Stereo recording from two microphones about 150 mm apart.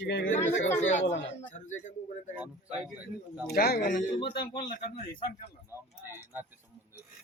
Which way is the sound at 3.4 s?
90° left.